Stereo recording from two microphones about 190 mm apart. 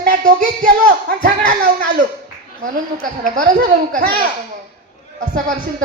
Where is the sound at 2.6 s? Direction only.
45° right (ahead or behind).